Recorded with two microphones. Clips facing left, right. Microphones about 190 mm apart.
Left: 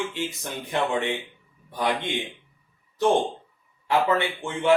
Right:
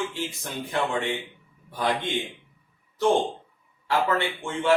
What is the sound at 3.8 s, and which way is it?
Speech, 15° left (ahead or behind).